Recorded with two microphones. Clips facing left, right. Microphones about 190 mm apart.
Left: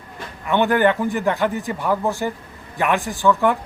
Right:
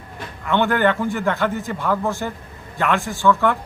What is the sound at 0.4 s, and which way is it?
A man's voice, 15° left (ahead or behind).